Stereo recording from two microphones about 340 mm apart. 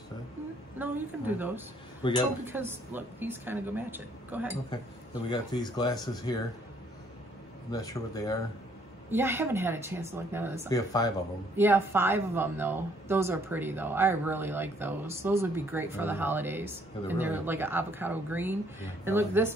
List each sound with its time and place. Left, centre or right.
0.7 s a woman's voice: centre
2.0 s speech: centre
2.4 s a woman's voice: centre
5.3 s speech: centre
7.7 s speech: centre
9.1 s speech: centre
10.7 s speech: centre
11.5 s speech: centre